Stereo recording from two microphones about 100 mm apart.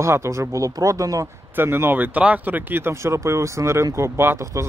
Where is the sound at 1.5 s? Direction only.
25° right (ahead or behind).